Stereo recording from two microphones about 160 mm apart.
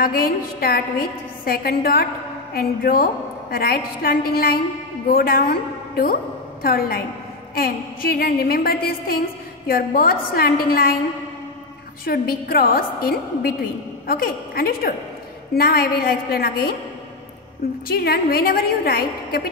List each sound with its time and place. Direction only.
0.0 s a woman's voice: 65° left (ahead or behind)
12.0 s a woman's voice: 70° left (ahead or behind)
17.9 s a woman's voice: 75° left (ahead or behind)